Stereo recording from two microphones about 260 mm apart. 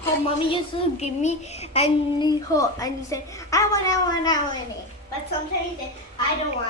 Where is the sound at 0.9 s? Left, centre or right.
Left.